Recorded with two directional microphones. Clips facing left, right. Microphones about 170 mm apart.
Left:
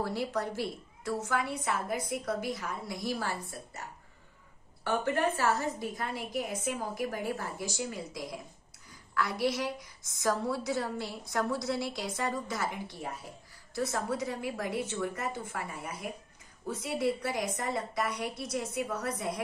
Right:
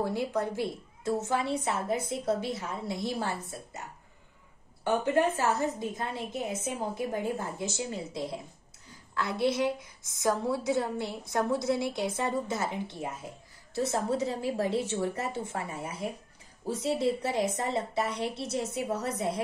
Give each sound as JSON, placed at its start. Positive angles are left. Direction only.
{"t": 0.0, "sound": "a woman's voice", "side_deg": -20}
{"t": 4.8, "sound": "a woman's voice", "side_deg": -20}